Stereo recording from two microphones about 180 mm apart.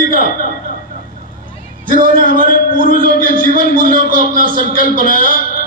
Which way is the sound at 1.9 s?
50° right (ahead or behind).